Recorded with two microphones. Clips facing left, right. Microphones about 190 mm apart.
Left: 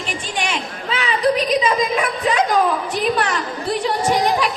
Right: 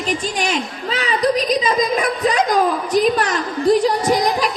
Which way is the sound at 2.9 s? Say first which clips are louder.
Right 4 dB; 40° right (ahead or behind).